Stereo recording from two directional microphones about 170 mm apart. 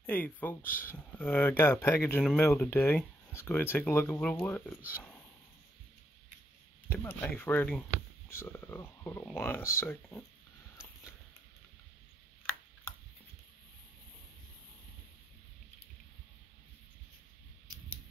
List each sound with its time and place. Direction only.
0.0 s speech: 10° left (ahead or behind)
6.9 s speech: 10° left (ahead or behind)